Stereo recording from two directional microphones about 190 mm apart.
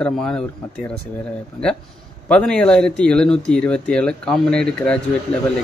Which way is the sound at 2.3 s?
5° left (ahead or behind).